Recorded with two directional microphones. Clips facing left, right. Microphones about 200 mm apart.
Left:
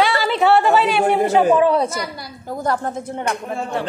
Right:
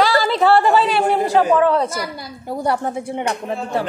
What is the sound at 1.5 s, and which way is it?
Speech, 15° left (ahead or behind).